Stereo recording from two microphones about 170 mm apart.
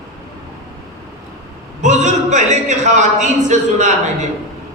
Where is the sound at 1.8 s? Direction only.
45° right (ahead or behind).